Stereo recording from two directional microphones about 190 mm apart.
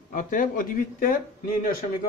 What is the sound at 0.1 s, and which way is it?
Speech, 45° left (ahead or behind).